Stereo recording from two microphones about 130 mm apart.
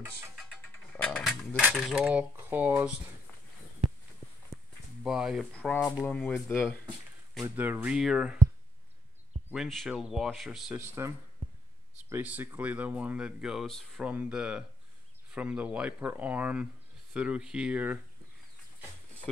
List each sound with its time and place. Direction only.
0.6 s music: 10° left (ahead or behind)
1.2 s cutlery: centre (ahead or behind)
1.6 s speech: 5° right (ahead or behind)
5.0 s speech: 5° right (ahead or behind)
5.4 s speech: 10° left (ahead or behind)
7.5 s speech: 15° right (ahead or behind)
9.5 s speech: centre (ahead or behind)
10.7 s speech: 20° right (ahead or behind)